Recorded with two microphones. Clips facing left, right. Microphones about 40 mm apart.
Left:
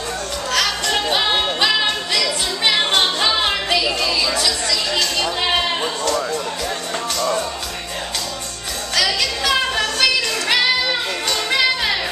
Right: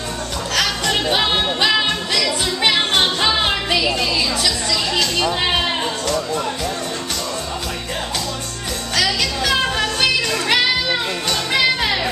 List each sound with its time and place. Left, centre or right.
0.6 s music: centre
8.9 s music: centre